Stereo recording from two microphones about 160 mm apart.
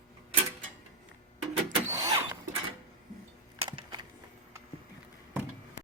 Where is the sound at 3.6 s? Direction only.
30° right (ahead or behind).